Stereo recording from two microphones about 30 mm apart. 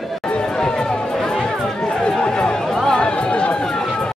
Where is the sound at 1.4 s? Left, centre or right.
Left.